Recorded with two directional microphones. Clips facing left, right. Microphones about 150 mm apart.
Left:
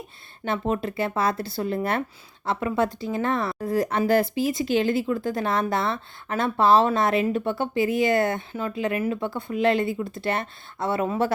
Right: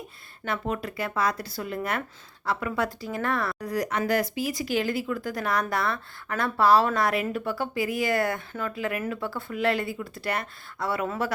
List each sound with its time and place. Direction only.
0.4 s speech: 25° left (ahead or behind)